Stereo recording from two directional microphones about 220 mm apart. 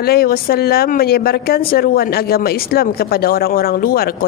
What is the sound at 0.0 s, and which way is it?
Speech, 45° left (ahead or behind).